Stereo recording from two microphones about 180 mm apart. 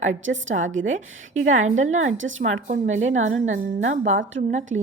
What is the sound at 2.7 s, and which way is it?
Speech, 40° right (ahead or behind).